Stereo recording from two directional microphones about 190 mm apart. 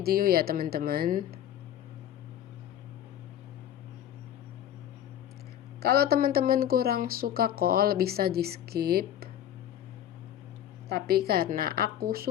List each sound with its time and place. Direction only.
0.0 s speech: 50° right (ahead or behind)
5.8 s speech: 55° right (ahead or behind)
10.8 s speech: 55° right (ahead or behind)